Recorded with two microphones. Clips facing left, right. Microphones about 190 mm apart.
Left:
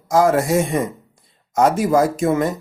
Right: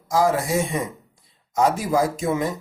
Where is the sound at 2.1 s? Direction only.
55° left (ahead or behind).